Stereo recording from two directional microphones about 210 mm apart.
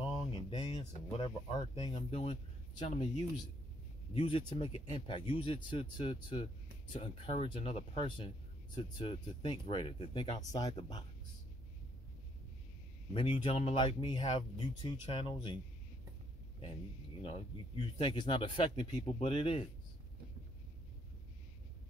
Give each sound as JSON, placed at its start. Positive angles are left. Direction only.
{"t": 0.1, "sound": "speech", "side_deg": 20}
{"t": 4.1, "sound": "speech", "side_deg": 25}
{"t": 13.1, "sound": "speech", "side_deg": 25}
{"t": 17.2, "sound": "speech", "side_deg": 30}